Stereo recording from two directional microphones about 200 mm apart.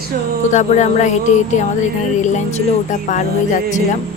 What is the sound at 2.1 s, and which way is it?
Speech, 35° left (ahead or behind).